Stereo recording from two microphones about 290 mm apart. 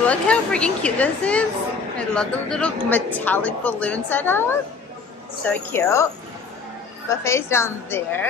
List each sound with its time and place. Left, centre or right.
0.0 s a woman's voice: centre
7.1 s a woman's voice: centre